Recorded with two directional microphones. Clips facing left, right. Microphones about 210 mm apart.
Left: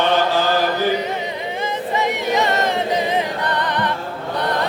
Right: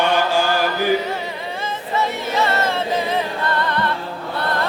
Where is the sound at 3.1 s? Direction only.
15° left (ahead or behind).